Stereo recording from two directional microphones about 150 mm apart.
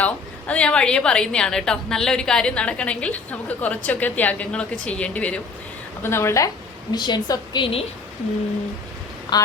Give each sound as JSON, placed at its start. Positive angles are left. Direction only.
{"t": 0.0, "sound": "a woman's voice", "side_deg": 10}
{"t": 9.3, "sound": "speech", "side_deg": 30}